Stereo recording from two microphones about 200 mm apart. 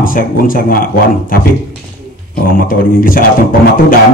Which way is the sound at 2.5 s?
45° left (ahead or behind).